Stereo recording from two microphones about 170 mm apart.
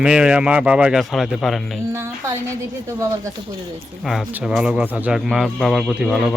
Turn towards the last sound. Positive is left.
turn(degrees=0)  # may be behind; listen again after turning